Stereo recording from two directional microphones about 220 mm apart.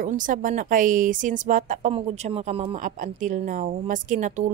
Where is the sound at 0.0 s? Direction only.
35° right (ahead or behind).